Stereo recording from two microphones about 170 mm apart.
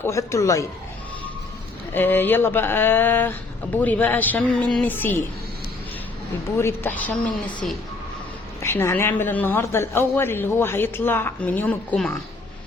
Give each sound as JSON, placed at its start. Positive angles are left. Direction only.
{"t": 0.0, "sound": "a woman's voice", "side_deg": 15}
{"t": 1.9, "sound": "a woman's voice", "side_deg": 10}
{"t": 6.6, "sound": "a woman's voice", "side_deg": 15}